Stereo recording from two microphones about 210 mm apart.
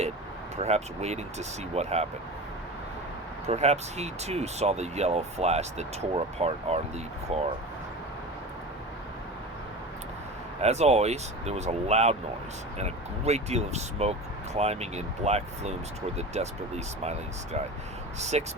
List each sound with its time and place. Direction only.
0.5 s speech: 30° right (ahead or behind)
3.5 s speech: 30° right (ahead or behind)
10.6 s speech: 30° right (ahead or behind)